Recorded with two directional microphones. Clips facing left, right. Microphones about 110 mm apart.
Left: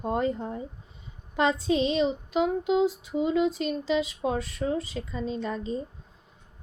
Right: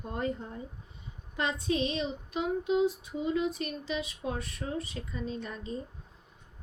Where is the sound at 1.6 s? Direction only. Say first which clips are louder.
Left 6 dB; 90° left.